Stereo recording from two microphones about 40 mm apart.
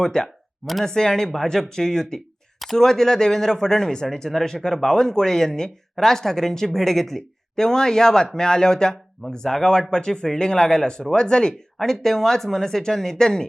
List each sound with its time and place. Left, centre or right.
0.0 s a man's voice: centre
0.6 s speech: centre
0.9 s a man's voice: centre